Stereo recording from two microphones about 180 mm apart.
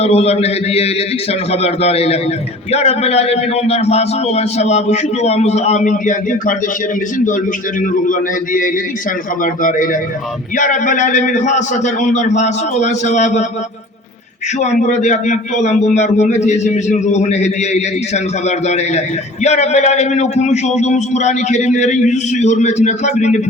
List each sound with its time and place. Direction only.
0.0 s a man's voice: 35° left (ahead or behind)
9.4 s a man's voice: 50° left (ahead or behind)
14.6 s a man's voice: 40° left (ahead or behind)